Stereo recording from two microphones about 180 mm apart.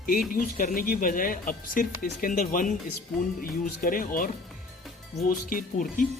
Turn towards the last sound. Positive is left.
turn(degrees=50)  # may be behind; listen again after turning